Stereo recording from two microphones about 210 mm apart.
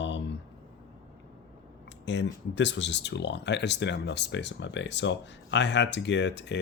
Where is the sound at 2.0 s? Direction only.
55° left (ahead or behind).